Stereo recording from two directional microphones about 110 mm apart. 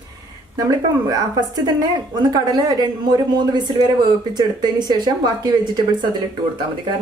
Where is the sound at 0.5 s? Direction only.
35° right (ahead or behind).